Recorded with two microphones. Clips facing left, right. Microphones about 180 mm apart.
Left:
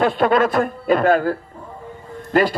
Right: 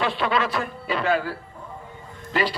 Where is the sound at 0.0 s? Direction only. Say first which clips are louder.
Left 8 dB; 45° left (ahead or behind).